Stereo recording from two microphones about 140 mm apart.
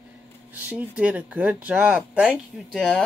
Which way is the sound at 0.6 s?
10° right (ahead or behind).